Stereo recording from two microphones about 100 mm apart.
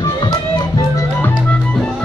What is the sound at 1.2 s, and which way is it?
Music, 20° left (ahead or behind).